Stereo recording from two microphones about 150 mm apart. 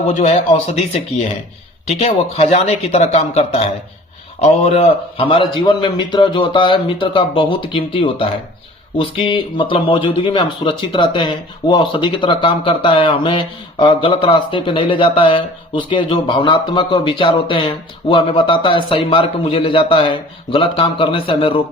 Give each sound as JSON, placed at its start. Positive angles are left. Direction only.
{"t": 0.1, "sound": "speech", "side_deg": 50}
{"t": 1.9, "sound": "speech", "side_deg": 45}